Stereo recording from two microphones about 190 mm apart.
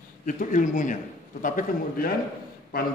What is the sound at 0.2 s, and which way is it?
A man's voice, 40° left (ahead or behind).